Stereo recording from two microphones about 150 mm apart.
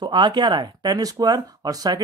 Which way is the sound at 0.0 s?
30° right (ahead or behind).